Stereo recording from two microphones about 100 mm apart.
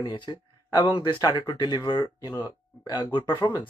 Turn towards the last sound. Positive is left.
turn(degrees=50)  # may be behind; listen again after turning